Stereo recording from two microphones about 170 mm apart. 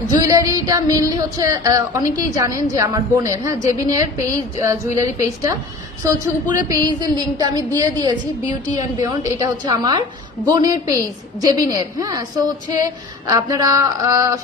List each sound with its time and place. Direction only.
0.0 s a woman's voice: 25° right (ahead or behind)